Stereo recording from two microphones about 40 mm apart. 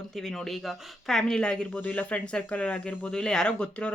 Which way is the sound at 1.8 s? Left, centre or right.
Left.